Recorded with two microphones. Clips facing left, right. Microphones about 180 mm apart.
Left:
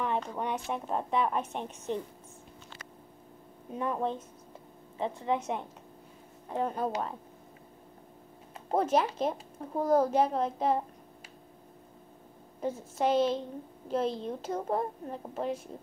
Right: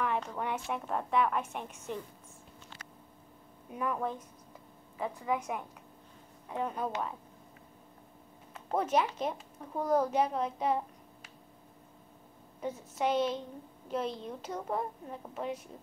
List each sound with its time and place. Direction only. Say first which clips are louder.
0.0 s a woman's voice: left 1 dB; 20° left (ahead or behind)
3.7 s a woman's voice: left 2 dB; 25° left (ahead or behind)
8.5 s speech: left 3 dB; 30° left (ahead or behind)
12.6 s a woman's voice: left 3 dB; 30° left (ahead or behind)